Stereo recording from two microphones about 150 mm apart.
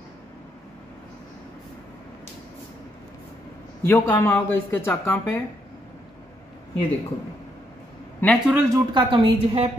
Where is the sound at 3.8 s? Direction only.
15° left (ahead or behind).